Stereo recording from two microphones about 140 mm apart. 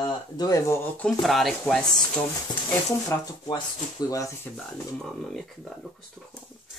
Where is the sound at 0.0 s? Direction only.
25° left (ahead or behind).